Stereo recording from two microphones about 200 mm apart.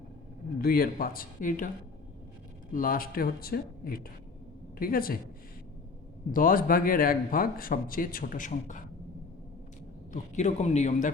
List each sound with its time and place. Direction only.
0.6 s a man's voice: 45° left (ahead or behind)
2.7 s a man's voice: 45° left (ahead or behind)
6.3 s a man's voice: 45° left (ahead or behind)
10.1 s a man's voice: 35° left (ahead or behind)